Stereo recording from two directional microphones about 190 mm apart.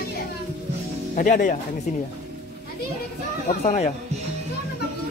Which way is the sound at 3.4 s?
35° left (ahead or behind).